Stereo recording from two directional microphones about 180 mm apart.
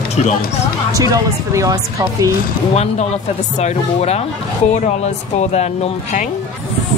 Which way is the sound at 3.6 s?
35° left (ahead or behind).